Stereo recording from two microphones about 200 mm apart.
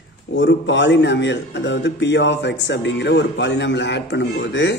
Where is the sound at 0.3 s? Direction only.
65° left (ahead or behind).